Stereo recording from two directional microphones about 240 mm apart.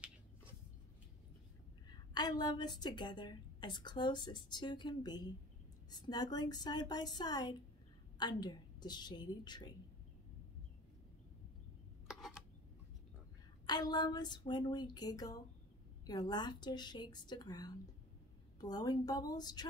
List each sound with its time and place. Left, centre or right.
1.9 s a woman's voice: centre
12.2 s a sound: centre
13.7 s a woman's voice: centre